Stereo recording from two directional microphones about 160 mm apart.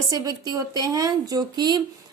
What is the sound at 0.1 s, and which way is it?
A woman's voice, 25° right (ahead or behind).